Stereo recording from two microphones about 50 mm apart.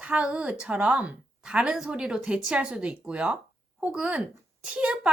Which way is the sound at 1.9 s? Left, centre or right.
Centre.